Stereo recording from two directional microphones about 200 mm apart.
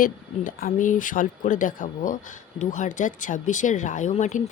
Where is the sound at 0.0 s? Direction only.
45° left (ahead or behind).